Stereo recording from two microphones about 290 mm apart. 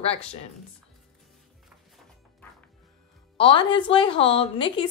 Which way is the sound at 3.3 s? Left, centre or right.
Centre.